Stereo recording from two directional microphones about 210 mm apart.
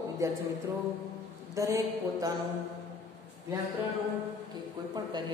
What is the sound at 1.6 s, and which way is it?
Speech, 15° right (ahead or behind).